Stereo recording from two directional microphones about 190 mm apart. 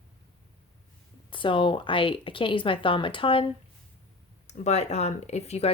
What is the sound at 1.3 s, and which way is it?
Speech, 25° left (ahead or behind).